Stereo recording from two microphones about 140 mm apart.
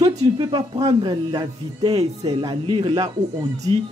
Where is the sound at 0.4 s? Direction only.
30° right (ahead or behind).